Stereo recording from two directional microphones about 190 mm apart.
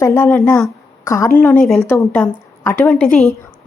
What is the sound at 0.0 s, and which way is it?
A woman's voice, 15° left (ahead or behind).